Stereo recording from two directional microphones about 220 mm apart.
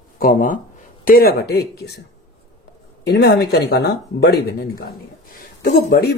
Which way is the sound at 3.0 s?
50° left (ahead or behind).